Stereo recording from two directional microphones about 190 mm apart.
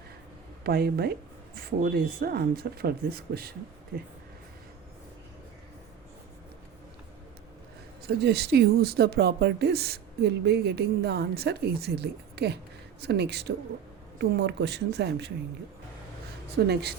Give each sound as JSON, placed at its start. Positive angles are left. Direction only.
{"t": 0.6, "sound": "speech", "side_deg": -55}
{"t": 8.0, "sound": "speech", "side_deg": -55}
{"t": 16.6, "sound": "speech", "side_deg": -60}